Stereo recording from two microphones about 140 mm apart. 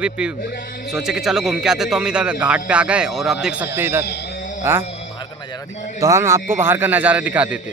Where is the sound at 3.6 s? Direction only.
15° right (ahead or behind).